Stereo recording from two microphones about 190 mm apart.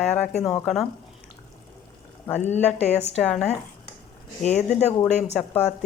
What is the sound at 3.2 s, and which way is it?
Speech, 5° left (ahead or behind).